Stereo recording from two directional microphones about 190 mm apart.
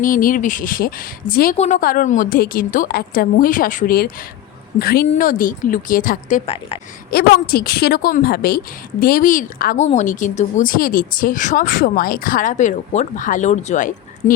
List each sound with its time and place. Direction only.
0.0 s a woman's voice: 45° left (ahead or behind)
1.5 s a woman's voice: 40° left (ahead or behind)
7.1 s a woman's voice: 55° left (ahead or behind)